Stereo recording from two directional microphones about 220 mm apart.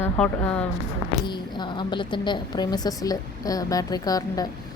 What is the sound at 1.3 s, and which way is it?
A woman's voice, 20° left (ahead or behind).